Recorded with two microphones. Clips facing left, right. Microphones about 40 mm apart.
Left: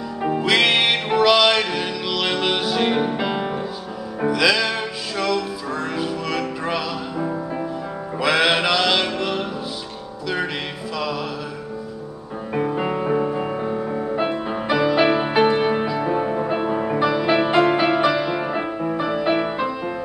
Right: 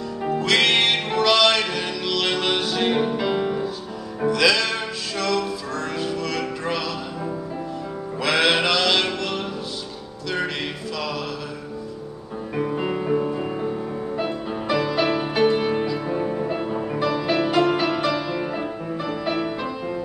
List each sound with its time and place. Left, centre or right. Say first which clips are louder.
0.2 s music: left 2 dB; centre
8.2 s mantra: left 2 dB; centre
12.5 s music: left 2 dB; centre